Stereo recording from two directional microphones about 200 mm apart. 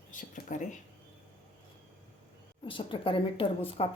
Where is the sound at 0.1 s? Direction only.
40° left (ahead or behind).